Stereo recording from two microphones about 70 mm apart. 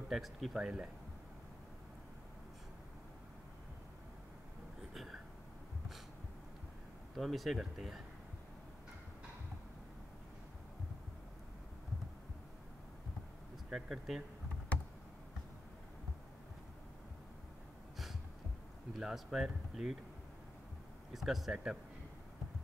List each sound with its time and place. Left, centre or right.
0.1 s speech: centre
7.2 s speech: centre
13.7 s speech: centre
18.9 s speech: centre
21.1 s speech: centre